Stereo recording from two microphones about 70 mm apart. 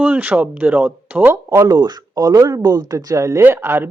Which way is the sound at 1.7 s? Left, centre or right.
Right.